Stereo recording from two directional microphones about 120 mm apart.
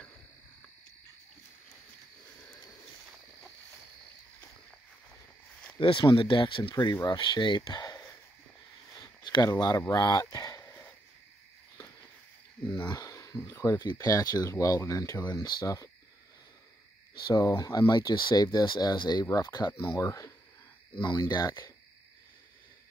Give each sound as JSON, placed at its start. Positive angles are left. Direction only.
{"t": 5.8, "sound": "speech", "side_deg": 45}
{"t": 7.7, "sound": "a sound", "side_deg": 30}
{"t": 9.6, "sound": "speech", "side_deg": 30}
{"t": 10.6, "sound": "a sound", "side_deg": 15}
{"t": 12.6, "sound": "speech", "side_deg": 40}
{"t": 15.2, "sound": "speech", "side_deg": 35}
{"t": 17.2, "sound": "speech", "side_deg": 30}